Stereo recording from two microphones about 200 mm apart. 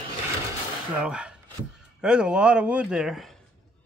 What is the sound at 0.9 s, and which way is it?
Speech, 5° right (ahead or behind).